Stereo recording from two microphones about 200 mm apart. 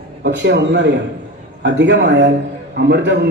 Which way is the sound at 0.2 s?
60° right (ahead or behind).